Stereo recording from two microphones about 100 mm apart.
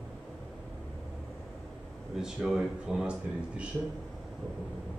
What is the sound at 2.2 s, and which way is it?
Speech, 5° right (ahead or behind).